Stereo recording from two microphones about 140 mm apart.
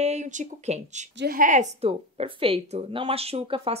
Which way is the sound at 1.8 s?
45° right (ahead or behind).